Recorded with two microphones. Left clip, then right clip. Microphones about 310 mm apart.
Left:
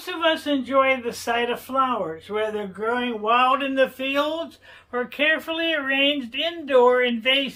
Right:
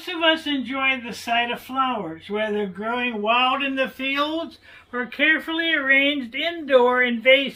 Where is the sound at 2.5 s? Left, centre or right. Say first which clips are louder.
Even; centre.